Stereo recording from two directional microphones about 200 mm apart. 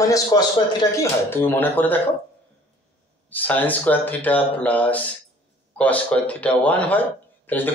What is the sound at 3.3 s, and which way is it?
Speech, 10° left (ahead or behind).